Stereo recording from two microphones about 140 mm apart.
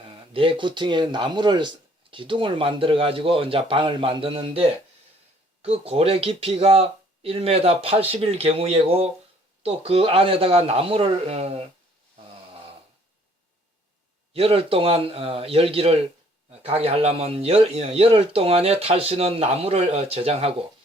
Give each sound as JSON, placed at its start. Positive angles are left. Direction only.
{"t": 0.1, "sound": "speech", "side_deg": -35}
{"t": 5.6, "sound": "a man's voice", "side_deg": -45}
{"t": 14.3, "sound": "a man's voice", "side_deg": -45}